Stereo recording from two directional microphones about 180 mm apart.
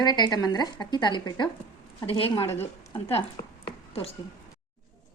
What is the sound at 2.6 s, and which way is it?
A woman's voice, 35° left (ahead or behind).